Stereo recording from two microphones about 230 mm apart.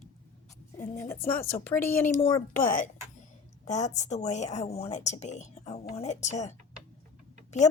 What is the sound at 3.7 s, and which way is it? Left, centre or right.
A woman's voice, left.